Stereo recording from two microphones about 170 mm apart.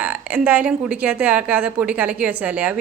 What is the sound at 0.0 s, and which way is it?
A woman's voice, 10° right (ahead or behind).